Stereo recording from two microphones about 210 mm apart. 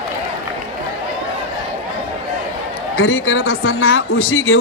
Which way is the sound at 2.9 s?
80° left.